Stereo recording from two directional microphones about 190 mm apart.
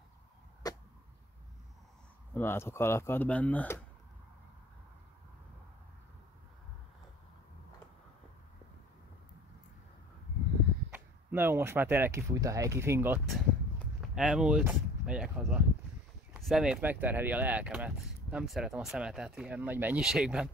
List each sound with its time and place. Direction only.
0.6 s a sound: 20° left (ahead or behind)
2.3 s speech: 10° left (ahead or behind)
10.9 s speech: 10° right (ahead or behind)
13.3 s speech: centre (ahead or behind)